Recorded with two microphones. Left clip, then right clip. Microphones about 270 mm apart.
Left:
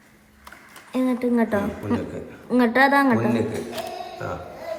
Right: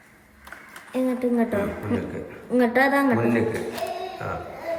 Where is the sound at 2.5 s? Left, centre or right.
Left.